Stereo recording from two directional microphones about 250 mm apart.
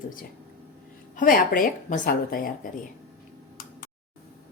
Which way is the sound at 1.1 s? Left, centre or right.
Left.